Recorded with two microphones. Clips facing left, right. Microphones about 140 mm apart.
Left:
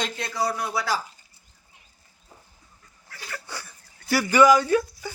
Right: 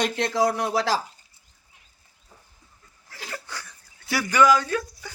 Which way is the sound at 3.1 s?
20° right (ahead or behind).